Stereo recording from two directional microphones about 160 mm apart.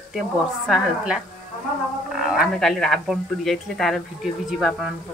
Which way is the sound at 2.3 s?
Centre (ahead or behind).